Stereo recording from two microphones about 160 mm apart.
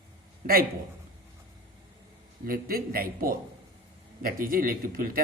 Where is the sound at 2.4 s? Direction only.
65° right (ahead or behind).